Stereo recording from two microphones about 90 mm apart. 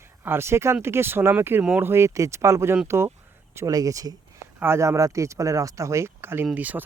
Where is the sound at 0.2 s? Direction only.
30° right (ahead or behind).